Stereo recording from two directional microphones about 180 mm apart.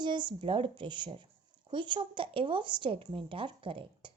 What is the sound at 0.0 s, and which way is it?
Speech, 25° right (ahead or behind).